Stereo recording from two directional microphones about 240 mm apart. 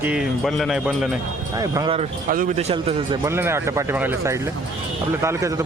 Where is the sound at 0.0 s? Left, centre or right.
Centre.